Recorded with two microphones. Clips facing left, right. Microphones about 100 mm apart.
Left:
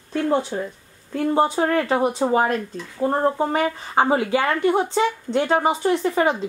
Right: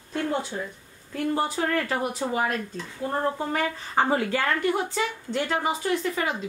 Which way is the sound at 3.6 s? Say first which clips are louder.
Left 5 dB; 20° left (ahead or behind).